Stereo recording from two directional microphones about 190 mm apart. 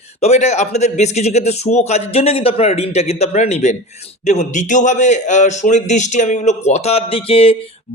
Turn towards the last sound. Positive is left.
turn(degrees=30)  # may be behind; listen again after turning